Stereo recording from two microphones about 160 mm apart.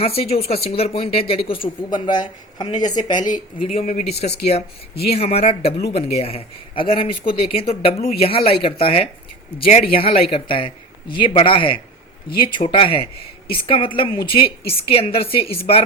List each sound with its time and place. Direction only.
0.0 s speech: 40° left (ahead or behind)
3.7 s speech: 45° left (ahead or behind)
9.6 s speech: 55° left (ahead or behind)
9.9 s speech: 35° left (ahead or behind)